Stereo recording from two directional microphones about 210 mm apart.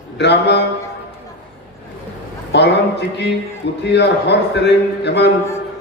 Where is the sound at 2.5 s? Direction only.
55° left (ahead or behind).